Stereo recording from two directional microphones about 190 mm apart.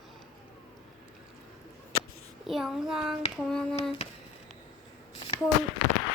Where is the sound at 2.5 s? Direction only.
Centre (ahead or behind).